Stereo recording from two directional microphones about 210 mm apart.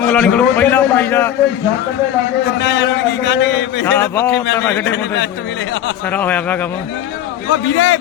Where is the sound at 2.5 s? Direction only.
55° left (ahead or behind).